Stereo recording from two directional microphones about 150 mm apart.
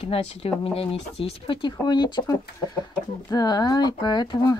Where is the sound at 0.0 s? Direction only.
40° left (ahead or behind).